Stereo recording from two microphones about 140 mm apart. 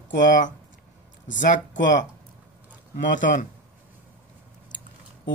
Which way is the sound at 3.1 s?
65° left (ahead or behind).